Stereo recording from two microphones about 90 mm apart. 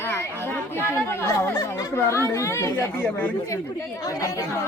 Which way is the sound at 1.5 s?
40° left (ahead or behind).